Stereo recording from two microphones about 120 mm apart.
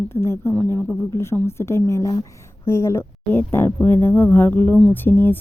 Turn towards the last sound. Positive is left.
turn(degrees=15)  # may be behind; listen again after turning